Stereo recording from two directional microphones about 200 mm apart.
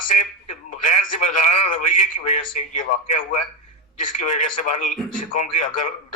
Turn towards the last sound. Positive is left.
turn(degrees=40)  # may be behind; listen again after turning